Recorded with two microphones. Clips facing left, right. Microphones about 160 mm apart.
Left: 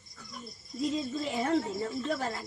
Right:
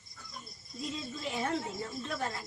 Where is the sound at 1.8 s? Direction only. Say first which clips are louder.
Left 5 dB; 40° left (ahead or behind).